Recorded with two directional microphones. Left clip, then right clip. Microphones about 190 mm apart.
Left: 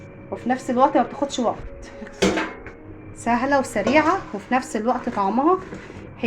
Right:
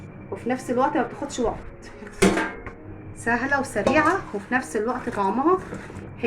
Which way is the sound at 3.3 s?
30° left (ahead or behind).